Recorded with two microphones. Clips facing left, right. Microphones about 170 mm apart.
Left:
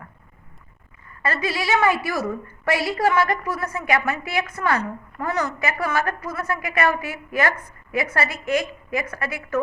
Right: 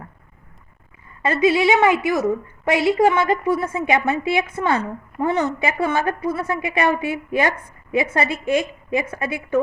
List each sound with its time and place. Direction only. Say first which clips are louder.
1.2 s a woman's voice: right 9 dB; 20° right (ahead or behind)